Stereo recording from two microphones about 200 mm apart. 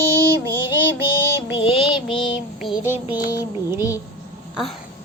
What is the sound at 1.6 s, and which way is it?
Child singing, 25° left (ahead or behind).